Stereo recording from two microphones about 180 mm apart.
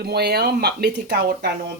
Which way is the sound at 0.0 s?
60° right (ahead or behind).